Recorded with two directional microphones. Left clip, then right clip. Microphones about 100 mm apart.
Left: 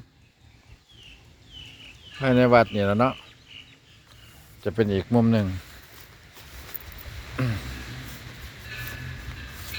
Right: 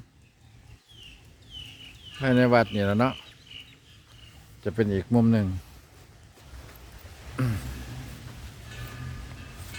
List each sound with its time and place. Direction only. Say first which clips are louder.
2.1 s speech: left 3 dB; 15° right (ahead or behind)
4.6 s speech: left 3 dB; 5° right (ahead or behind)
7.4 s a sound: left 2 dB; 30° right (ahead or behind)